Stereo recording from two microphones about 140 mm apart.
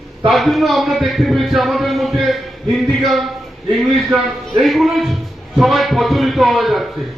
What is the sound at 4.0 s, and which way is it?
A man's voice, centre (ahead or behind).